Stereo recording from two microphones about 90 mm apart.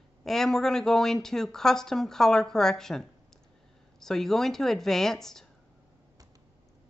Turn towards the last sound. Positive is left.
turn(degrees=5)  # may be behind; listen again after turning